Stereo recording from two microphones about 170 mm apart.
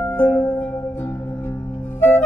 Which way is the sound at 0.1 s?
10° left (ahead or behind).